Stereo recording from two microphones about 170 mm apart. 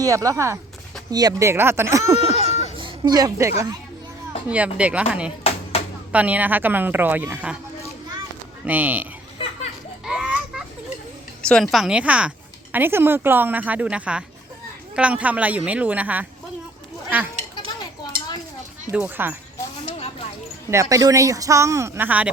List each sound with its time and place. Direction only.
0.0 s a woman's voice: 20° right (ahead or behind)
2.2 s a sound: 35° right (ahead or behind); by 3.5 s 20° right (ahead or behind)
4.4 s a woman's voice: 10° right (ahead or behind)
5.4 s music: 35° left (ahead or behind)
6.1 s a woman's voice: 10° right (ahead or behind)
8.6 s a woman's voice: 10° right (ahead or behind)
10.1 s children playing: 5° right (ahead or behind)
11.4 s a woman's voice: 5° left (ahead or behind)
18.9 s a woman's voice: 10° right (ahead or behind)
19.8 s a sound: 35° left (ahead or behind)
20.9 s a woman's voice: 20° right (ahead or behind)